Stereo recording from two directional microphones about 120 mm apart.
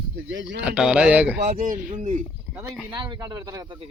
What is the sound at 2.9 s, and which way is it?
Speech, 40° right (ahead or behind).